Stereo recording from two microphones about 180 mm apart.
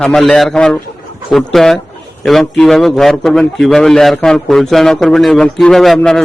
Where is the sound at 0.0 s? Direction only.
5° left (ahead or behind).